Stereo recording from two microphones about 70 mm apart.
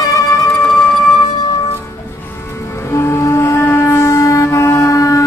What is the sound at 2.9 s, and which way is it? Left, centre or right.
Music, left.